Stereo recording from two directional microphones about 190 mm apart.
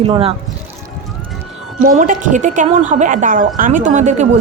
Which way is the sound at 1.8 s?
45° right (ahead or behind).